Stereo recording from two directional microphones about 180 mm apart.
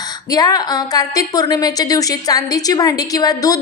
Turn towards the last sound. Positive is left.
turn(degrees=20)  # may be behind; listen again after turning